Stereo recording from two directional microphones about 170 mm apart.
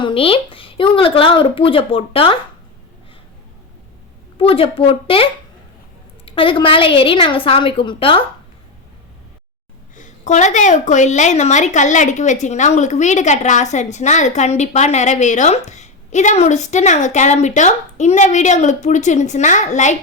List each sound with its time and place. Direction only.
0.0 s speech: 35° left (ahead or behind)
4.4 s speech: 35° left (ahead or behind)
9.9 s a woman's voice: 45° left (ahead or behind)